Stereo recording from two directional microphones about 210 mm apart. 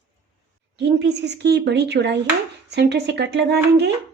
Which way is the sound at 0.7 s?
55° right (ahead or behind).